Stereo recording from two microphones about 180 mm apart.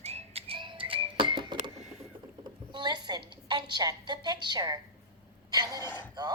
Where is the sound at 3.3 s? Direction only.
25° right (ahead or behind).